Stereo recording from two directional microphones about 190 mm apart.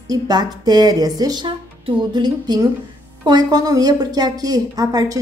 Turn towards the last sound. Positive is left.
turn(degrees=-20)  # may be behind; listen again after turning